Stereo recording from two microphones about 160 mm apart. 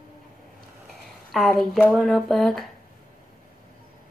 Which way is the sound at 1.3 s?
Centre (ahead or behind).